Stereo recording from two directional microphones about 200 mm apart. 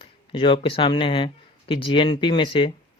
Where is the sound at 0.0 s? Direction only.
25° left (ahead or behind).